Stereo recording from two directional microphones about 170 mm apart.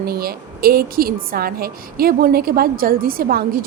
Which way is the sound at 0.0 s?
60° right (ahead or behind).